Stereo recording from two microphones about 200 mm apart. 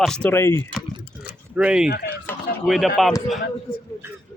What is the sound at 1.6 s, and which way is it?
Speech, 5° right (ahead or behind).